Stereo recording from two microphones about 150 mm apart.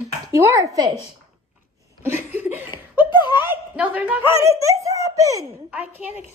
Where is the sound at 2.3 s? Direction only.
15° right (ahead or behind).